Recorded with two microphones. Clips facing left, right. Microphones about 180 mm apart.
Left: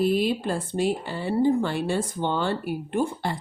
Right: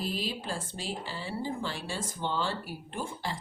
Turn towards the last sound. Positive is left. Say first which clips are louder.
# left 10 dB
turn(degrees=60)  # may be behind; listen again after turning